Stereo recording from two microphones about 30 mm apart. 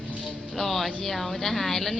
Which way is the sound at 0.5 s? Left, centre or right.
Centre.